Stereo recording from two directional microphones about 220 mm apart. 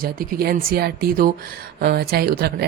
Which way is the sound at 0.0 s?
40° right (ahead or behind).